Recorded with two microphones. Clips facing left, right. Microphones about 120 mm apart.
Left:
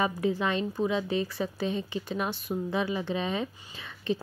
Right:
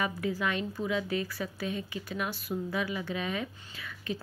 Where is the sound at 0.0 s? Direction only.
25° left (ahead or behind).